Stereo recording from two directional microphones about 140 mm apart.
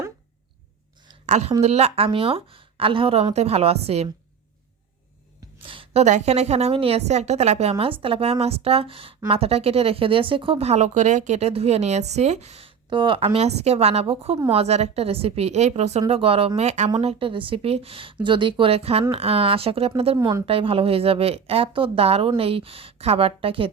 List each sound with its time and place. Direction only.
1.3 s speech: 50° right (ahead or behind)
5.5 s speech: 40° right (ahead or behind); by 16.9 s 55° right (ahead or behind)
17.0 s speech: 40° right (ahead or behind)